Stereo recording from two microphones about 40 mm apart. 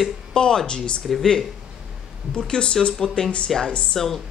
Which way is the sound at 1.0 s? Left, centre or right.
Centre.